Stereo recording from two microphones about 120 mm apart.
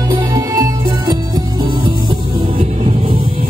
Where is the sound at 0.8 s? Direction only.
40° right (ahead or behind).